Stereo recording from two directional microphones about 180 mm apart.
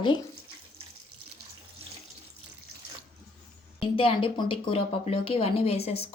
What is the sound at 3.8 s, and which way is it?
Speech, 30° left (ahead or behind).